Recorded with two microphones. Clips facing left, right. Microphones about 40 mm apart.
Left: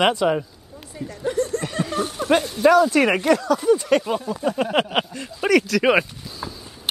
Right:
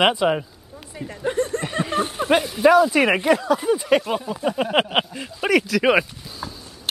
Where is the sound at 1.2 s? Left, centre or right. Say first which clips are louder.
Even; right.